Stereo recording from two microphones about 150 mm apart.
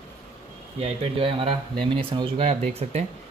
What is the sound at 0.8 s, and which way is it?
Speech, 40° right (ahead or behind).